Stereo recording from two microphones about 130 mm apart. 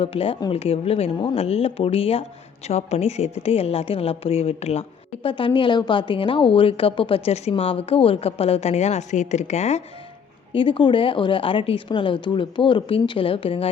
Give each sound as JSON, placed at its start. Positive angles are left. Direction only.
{"t": 0.0, "sound": "a woman's voice", "side_deg": 45}
{"t": 10.5, "sound": "a woman's voice", "side_deg": 40}